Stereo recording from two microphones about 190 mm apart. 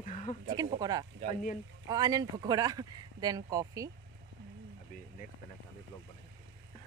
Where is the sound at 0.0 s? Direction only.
40° left (ahead or behind).